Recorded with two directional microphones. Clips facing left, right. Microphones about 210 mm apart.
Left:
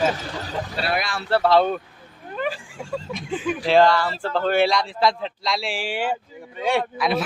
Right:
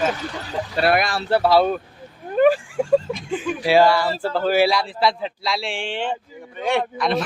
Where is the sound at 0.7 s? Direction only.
50° right (ahead or behind).